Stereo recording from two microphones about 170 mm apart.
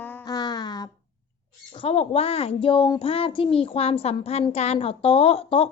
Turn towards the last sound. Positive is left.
turn(degrees=35)  # may be behind; listen again after turning